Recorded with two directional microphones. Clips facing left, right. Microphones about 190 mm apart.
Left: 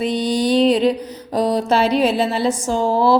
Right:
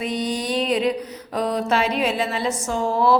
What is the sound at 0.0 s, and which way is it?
Mantra, 30° left (ahead or behind).